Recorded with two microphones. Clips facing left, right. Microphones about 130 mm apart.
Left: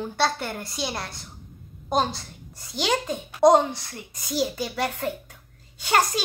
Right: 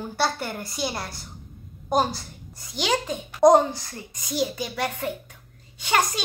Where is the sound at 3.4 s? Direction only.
20° left (ahead or behind).